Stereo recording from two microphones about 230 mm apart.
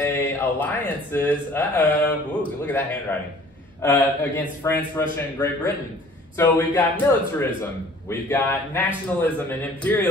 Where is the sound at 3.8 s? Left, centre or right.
Centre.